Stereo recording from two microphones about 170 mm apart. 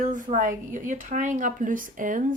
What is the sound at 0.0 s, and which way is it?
A woman's voice, 50° right (ahead or behind).